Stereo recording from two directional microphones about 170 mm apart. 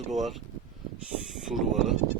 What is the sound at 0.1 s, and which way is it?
Speech, centre (ahead or behind).